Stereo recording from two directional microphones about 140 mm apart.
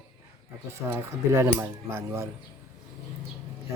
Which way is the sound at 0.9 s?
20° right (ahead or behind).